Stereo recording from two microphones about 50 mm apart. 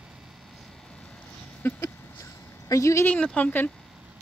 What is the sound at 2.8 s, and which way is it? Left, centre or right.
Speech, left.